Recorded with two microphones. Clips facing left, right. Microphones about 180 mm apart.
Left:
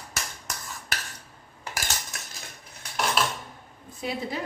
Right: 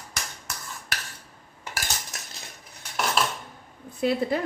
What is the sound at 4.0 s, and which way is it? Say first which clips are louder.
Speech: right 7 dB; 60° right (ahead or behind).